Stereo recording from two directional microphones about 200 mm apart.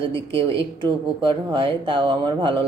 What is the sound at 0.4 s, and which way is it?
Speech, 25° right (ahead or behind).